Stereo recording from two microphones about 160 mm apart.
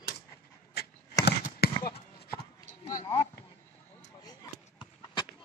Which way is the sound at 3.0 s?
25° left (ahead or behind).